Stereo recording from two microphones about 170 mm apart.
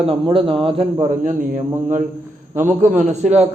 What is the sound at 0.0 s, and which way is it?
Speech, 35° right (ahead or behind).